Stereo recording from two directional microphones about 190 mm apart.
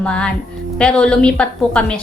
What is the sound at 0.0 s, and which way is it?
Speech, 5° left (ahead or behind).